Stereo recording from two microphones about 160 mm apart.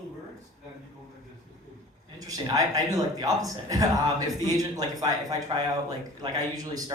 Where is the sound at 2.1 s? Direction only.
25° right (ahead or behind).